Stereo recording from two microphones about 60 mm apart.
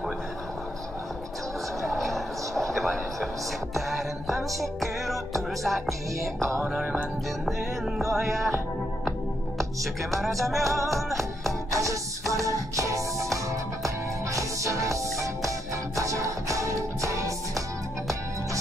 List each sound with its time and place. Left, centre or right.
1.8 s a sound: centre
3.7 s music: centre
10.2 s music: centre
11.7 s music: right